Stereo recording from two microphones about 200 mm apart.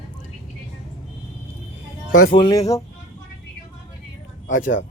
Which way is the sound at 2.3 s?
20° left (ahead or behind).